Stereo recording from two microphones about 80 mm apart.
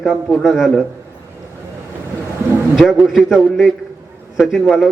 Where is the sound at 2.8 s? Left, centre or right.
Centre.